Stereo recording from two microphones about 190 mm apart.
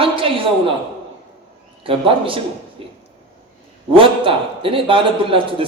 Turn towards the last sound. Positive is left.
turn(degrees=-30)  # may be behind; listen again after turning